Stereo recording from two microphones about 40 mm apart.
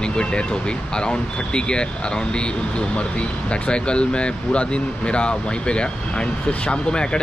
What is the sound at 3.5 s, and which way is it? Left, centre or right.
Speech, left.